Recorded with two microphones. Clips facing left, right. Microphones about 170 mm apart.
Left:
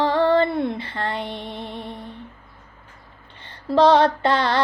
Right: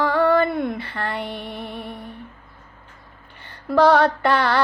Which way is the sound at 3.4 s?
25° left (ahead or behind).